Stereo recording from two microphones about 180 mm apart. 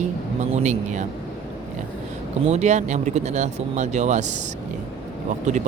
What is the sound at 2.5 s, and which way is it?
Speech, 40° right (ahead or behind).